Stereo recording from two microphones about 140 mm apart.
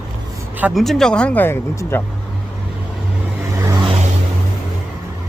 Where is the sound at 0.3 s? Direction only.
10° right (ahead or behind).